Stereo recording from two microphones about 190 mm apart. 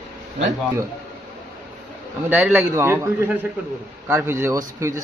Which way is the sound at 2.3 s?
10° right (ahead or behind).